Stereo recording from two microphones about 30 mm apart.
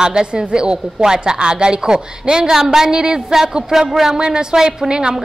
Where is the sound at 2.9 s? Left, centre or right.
Right.